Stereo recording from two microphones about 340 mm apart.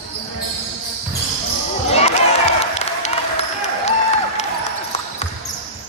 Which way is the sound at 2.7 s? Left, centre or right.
Centre.